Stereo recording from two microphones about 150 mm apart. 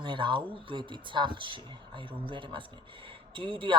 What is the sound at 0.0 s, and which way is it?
Speech, 35° right (ahead or behind).